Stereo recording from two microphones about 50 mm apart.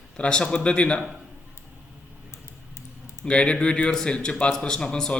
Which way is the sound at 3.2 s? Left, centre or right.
Left.